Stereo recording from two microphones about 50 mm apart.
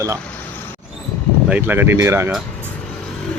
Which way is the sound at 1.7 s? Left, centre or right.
Right.